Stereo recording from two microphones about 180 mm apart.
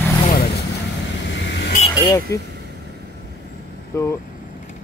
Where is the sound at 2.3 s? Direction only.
15° left (ahead or behind).